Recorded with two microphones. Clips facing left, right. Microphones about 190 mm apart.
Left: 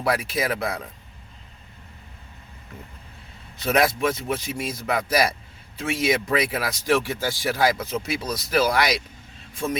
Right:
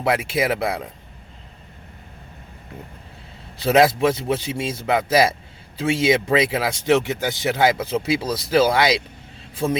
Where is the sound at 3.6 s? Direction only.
25° right (ahead or behind).